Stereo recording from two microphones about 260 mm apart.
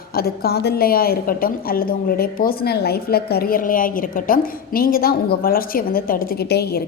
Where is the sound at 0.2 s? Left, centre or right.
Left.